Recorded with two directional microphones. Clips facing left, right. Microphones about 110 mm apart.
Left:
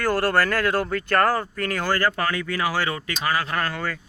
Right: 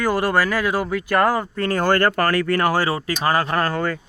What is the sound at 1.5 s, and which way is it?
Speech, 30° right (ahead or behind).